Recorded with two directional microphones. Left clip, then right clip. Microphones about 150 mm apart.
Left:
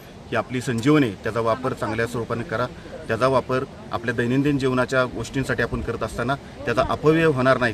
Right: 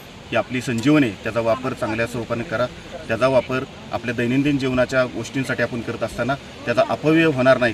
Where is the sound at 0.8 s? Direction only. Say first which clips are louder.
Right 1 dB; 30° left (ahead or behind).